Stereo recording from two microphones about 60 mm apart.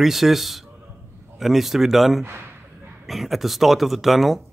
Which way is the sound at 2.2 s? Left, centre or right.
Right.